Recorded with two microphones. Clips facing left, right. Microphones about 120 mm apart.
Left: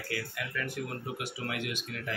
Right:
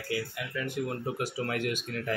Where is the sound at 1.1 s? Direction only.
40° right (ahead or behind).